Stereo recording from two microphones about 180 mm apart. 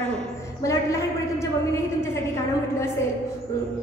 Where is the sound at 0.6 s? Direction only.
15° left (ahead or behind).